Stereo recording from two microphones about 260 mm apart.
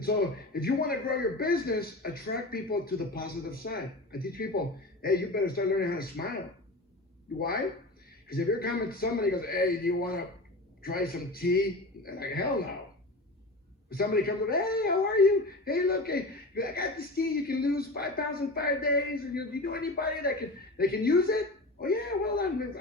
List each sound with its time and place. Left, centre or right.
0.0 s a man's voice: left
8.3 s a man's voice: left
13.9 s a man's voice: left